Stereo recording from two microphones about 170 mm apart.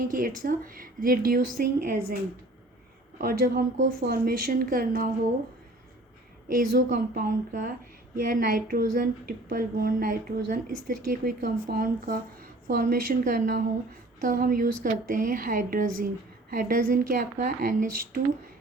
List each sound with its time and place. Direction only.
0.0 s a woman's voice: 55° right (ahead or behind)
3.2 s a woman's voice: 60° right (ahead or behind)
6.5 s a woman's voice: 60° right (ahead or behind)